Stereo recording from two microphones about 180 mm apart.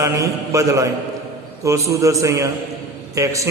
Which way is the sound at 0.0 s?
20° right (ahead or behind).